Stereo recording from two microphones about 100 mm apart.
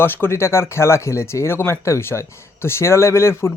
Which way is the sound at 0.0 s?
25° left (ahead or behind).